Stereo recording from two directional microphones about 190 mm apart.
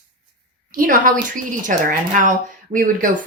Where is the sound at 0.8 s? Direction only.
45° right (ahead or behind).